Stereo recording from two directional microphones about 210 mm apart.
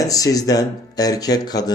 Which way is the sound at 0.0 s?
15° left (ahead or behind).